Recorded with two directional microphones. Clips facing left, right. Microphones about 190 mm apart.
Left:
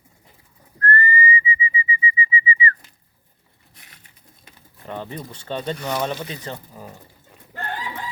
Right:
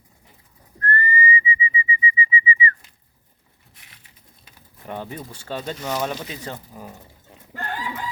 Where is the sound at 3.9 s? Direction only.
50° left (ahead or behind).